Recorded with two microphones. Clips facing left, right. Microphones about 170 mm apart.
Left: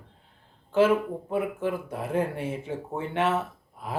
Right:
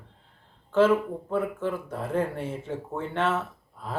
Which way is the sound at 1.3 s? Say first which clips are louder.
Even; 15° left (ahead or behind).